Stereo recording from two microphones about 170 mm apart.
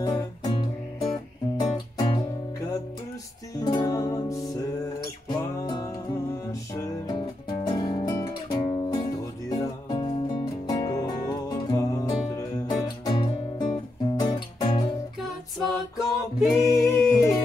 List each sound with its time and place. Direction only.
0.0 s music: 20° left (ahead or behind)
3.5 s music: 20° left (ahead or behind)
15.5 s music: centre (ahead or behind)
16.4 s singing: 20° left (ahead or behind)